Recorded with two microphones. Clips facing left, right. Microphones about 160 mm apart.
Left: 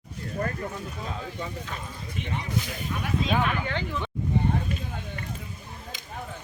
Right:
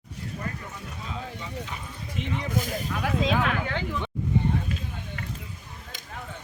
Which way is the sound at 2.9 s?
90° right.